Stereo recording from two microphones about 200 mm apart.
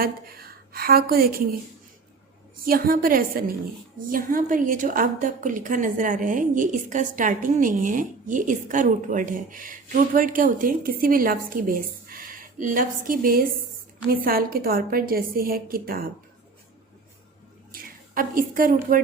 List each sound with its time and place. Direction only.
0.0 s a woman's voice: 50° right (ahead or behind)
2.6 s a woman's voice: 45° right (ahead or behind)
17.7 s a woman's voice: 45° right (ahead or behind)